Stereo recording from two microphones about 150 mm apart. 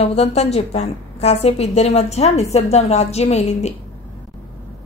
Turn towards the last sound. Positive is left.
turn(degrees=45)  # may be behind; listen again after turning